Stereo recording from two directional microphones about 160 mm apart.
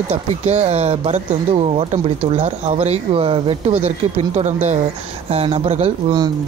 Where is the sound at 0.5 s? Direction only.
45° right (ahead or behind).